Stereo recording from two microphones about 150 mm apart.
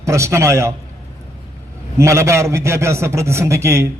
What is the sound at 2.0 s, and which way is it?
A man's voice, 20° right (ahead or behind).